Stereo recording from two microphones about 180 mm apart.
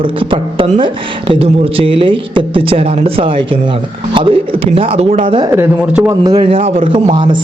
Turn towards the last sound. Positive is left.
turn(degrees=-25)  # may be behind; listen again after turning